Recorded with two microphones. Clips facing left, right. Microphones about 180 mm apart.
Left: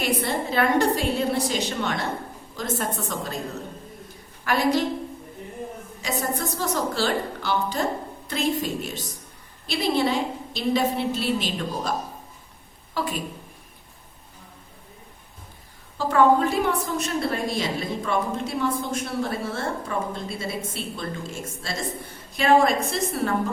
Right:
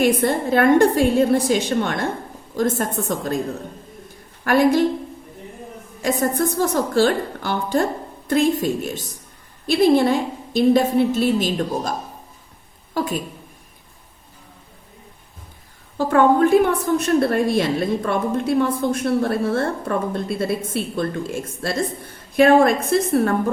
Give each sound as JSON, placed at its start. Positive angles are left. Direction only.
{"t": 0.0, "sound": "a woman's voice", "side_deg": -50}
{"t": 4.4, "sound": "a woman's voice", "side_deg": -50}
{"t": 6.0, "sound": "a woman's voice", "side_deg": -50}
{"t": 16.0, "sound": "a woman's voice", "side_deg": -55}